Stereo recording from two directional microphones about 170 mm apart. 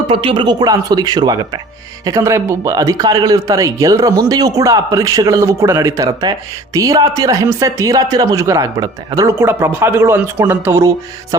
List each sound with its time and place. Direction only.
0.1 s speech: 30° right (ahead or behind); by 11.3 s 15° right (ahead or behind)